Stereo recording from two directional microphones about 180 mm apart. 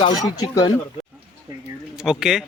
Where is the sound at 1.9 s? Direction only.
5° right (ahead or behind).